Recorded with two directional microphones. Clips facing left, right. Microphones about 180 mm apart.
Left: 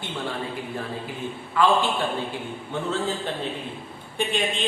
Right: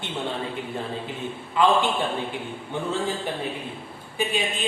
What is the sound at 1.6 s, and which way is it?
Speech, 20° right (ahead or behind).